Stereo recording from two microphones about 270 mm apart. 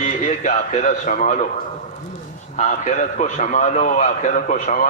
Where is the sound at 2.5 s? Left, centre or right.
Left.